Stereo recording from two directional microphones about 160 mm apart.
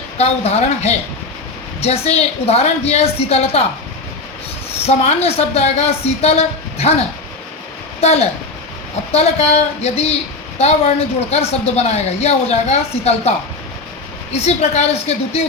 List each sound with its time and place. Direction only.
0.2 s speech: 40° left (ahead or behind)
4.9 s speech: 40° left (ahead or behind)
8.0 s a man's voice: 40° left (ahead or behind)
14.4 s speech: 40° left (ahead or behind)